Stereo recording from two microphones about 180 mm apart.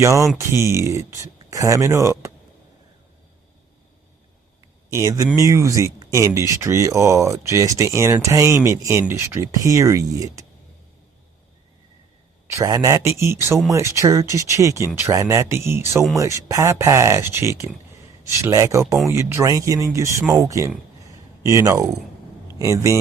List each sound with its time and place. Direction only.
0.0 s speech: 15° right (ahead or behind)
4.9 s speech: 15° right (ahead or behind)
12.5 s speech: 15° right (ahead or behind)